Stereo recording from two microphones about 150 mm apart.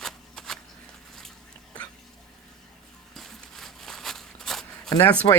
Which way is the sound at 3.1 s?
5° left (ahead or behind).